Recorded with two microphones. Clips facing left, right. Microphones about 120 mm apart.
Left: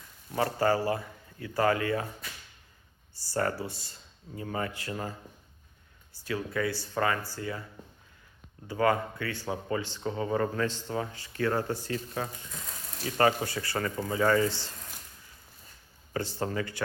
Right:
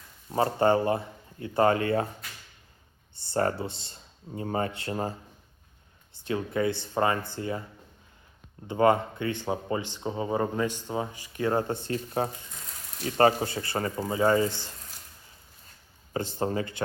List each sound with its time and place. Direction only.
0.3 s speech: 25° right (ahead or behind)
3.2 s speech: 25° right (ahead or behind)
6.1 s speech: 25° right (ahead or behind)
8.6 s speech: 25° right (ahead or behind)
12.2 s speech: 35° right (ahead or behind); by 14.7 s 15° right (ahead or behind)
16.1 s speech: 20° right (ahead or behind)